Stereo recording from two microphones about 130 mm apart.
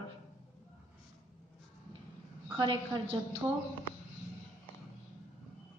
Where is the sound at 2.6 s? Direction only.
40° right (ahead or behind).